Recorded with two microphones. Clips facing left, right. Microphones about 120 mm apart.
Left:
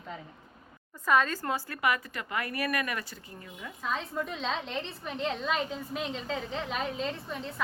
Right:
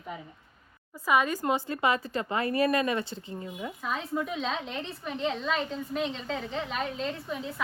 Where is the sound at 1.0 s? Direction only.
10° right (ahead or behind).